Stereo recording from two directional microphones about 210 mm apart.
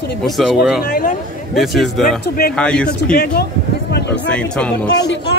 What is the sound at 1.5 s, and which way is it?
Speech, centre (ahead or behind).